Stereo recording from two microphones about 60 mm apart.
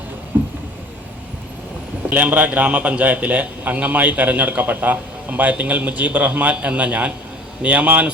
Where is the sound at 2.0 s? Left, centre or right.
Right.